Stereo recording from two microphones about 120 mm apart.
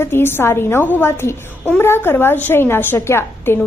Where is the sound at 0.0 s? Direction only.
20° left (ahead or behind).